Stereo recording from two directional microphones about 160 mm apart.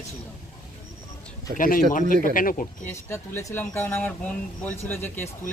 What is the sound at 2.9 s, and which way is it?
Speech, 15° left (ahead or behind).